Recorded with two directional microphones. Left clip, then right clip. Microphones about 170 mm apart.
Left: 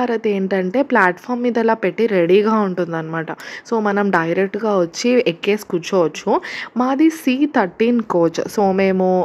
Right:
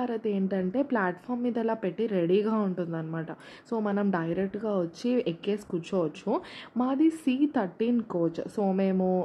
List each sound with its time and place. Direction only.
0.0 s speech: 15° left (ahead or behind)